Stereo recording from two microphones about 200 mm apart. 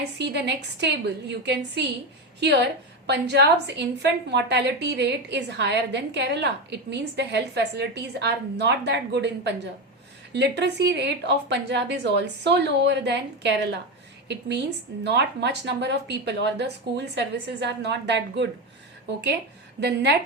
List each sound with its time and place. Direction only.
0.2 s a woman's voice: 60° right (ahead or behind)
19.8 s a woman's voice: 60° right (ahead or behind)